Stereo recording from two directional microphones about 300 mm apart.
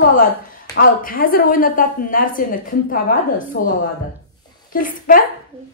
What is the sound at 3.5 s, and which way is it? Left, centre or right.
A woman's voice, left.